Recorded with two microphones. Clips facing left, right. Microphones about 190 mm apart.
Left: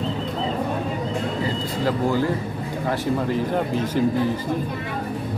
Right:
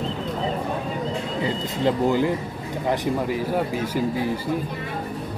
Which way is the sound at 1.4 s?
20° right (ahead or behind).